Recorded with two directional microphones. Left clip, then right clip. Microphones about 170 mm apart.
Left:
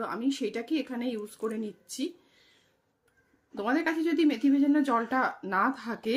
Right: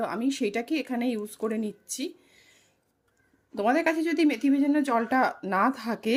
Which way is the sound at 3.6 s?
35° right (ahead or behind).